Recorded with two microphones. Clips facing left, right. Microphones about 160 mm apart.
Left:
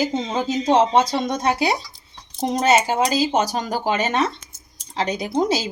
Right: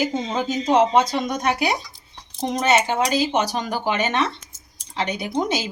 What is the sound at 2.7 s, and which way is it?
Speech, 5° left (ahead or behind).